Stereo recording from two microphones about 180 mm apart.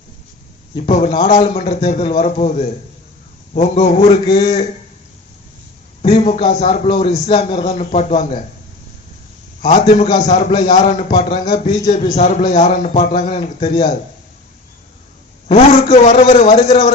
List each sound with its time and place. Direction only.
0.8 s a man's voice: 40° left (ahead or behind)
1.1 s a man's voice: 30° left (ahead or behind)
6.0 s a man's voice: 35° left (ahead or behind)
9.6 s a man's voice: 45° left (ahead or behind); by 13.8 s 30° left (ahead or behind)
15.4 s a man's voice: 35° left (ahead or behind)